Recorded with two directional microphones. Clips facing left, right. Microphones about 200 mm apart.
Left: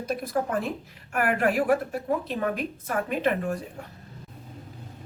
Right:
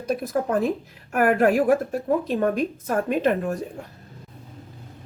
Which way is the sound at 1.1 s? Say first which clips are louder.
Right 6 dB; 45° right (ahead or behind).